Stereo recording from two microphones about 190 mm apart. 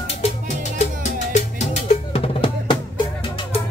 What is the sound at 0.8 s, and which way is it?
Drum, 35° left (ahead or behind).